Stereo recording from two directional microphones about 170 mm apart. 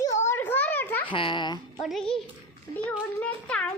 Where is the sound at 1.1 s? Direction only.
30° left (ahead or behind).